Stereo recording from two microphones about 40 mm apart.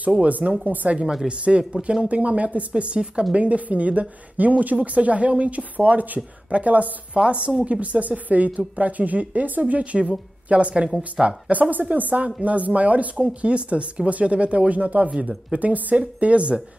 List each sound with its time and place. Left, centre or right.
0.2 s a woman's voice: right
2.0 s a woman's voice: right
2.7 s speech: right
3.3 s a woman's voice: right
11.7 s a woman's voice: right